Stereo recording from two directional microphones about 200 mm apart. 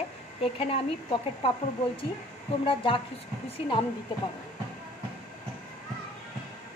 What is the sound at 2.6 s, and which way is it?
Speech, 25° left (ahead or behind).